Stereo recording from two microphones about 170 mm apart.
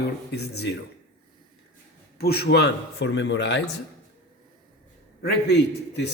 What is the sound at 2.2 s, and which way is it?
Speech, 65° left (ahead or behind).